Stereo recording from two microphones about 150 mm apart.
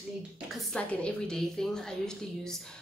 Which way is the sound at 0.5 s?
5° left (ahead or behind).